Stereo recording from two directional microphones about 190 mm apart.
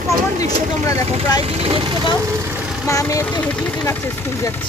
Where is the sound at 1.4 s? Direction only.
30° right (ahead or behind).